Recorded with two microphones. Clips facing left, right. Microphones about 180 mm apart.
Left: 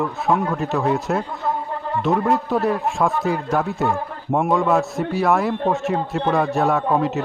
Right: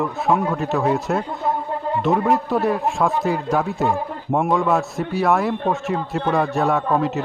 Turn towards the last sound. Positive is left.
turn(degrees=0)  # may be behind; listen again after turning